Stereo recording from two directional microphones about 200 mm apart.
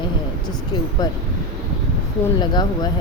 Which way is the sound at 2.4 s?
20° left (ahead or behind).